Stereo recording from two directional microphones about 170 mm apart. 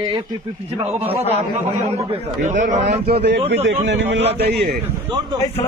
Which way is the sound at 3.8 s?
90° right.